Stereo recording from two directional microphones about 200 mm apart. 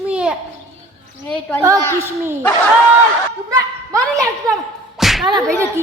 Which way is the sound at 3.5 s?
15° right (ahead or behind).